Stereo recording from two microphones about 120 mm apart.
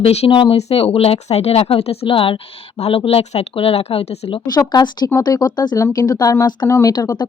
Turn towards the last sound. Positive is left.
turn(degrees=35)  # may be behind; listen again after turning